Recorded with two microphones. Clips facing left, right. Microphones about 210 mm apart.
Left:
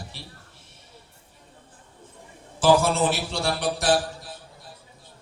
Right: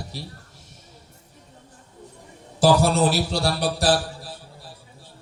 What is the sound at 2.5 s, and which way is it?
Speech, 40° right (ahead or behind).